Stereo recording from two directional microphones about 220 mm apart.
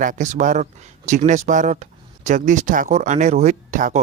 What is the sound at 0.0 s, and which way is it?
Speech, 35° right (ahead or behind).